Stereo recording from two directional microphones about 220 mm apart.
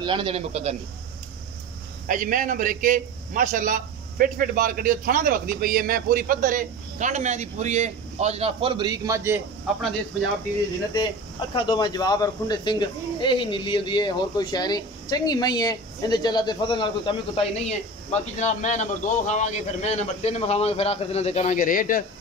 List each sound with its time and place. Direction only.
0.0 s a man's voice: 20° right (ahead or behind)
2.0 s a man's voice: 35° right (ahead or behind); by 9.8 s 10° right (ahead or behind)
11.5 s speech: 20° left (ahead or behind); by 22.0 s 40° left (ahead or behind)